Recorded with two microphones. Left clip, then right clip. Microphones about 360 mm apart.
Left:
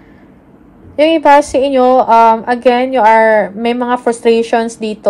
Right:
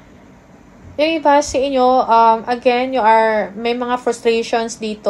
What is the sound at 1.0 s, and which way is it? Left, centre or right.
A woman's voice, left.